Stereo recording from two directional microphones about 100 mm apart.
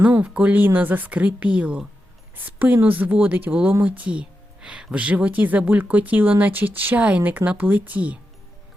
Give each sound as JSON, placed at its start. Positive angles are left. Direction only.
{"t": 0.0, "sound": "speech", "side_deg": -15}